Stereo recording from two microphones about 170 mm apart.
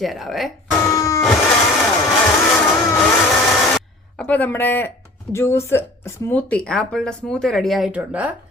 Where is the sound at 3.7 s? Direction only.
10° left (ahead or behind).